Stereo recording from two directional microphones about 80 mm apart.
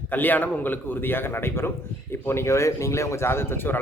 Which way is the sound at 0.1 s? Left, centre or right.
Left.